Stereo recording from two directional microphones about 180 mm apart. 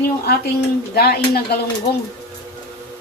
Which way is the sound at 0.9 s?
60° left (ahead or behind).